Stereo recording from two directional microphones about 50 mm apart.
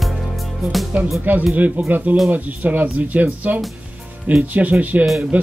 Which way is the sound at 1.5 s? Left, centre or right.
Right.